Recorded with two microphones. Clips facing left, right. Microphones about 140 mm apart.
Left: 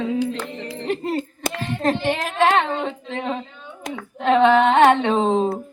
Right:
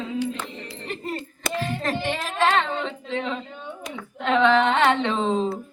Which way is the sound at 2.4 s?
50° left (ahead or behind).